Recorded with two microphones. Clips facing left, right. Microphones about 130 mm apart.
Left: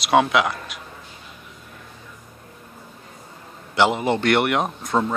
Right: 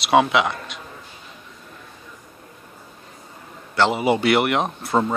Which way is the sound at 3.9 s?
5° right (ahead or behind).